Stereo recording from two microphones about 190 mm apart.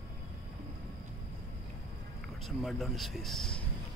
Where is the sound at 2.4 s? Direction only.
Centre (ahead or behind).